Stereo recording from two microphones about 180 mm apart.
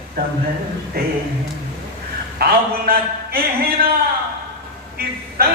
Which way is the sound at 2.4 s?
60° right (ahead or behind).